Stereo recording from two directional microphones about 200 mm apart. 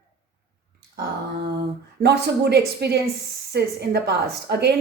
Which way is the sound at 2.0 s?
55° right (ahead or behind).